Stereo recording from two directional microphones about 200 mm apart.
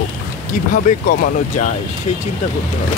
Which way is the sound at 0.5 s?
45° left (ahead or behind).